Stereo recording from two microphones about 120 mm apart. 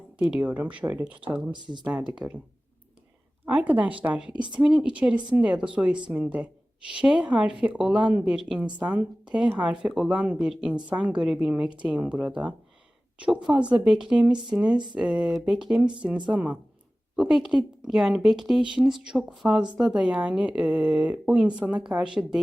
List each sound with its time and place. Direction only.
0.2 s speech: 10° right (ahead or behind)
1.5 s speech: 40° right (ahead or behind)
1.8 s speech: 10° right (ahead or behind)
3.4 s a woman's voice: 10° right (ahead or behind)